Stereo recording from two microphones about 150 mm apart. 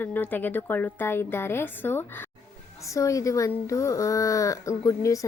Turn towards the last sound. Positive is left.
turn(degrees=20)  # may be behind; listen again after turning